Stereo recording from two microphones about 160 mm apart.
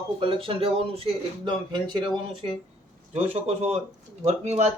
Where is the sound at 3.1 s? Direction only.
40° right (ahead or behind).